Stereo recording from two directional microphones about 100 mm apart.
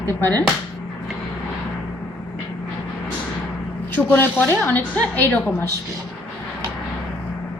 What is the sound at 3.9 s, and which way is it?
A woman's voice, 20° left (ahead or behind).